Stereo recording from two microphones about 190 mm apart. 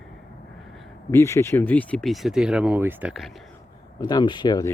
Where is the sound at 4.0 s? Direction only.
20° left (ahead or behind).